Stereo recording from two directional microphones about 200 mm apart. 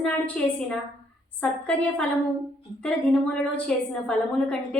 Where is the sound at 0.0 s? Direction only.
5° left (ahead or behind).